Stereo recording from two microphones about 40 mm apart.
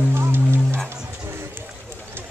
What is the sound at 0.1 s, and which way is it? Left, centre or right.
Music, right.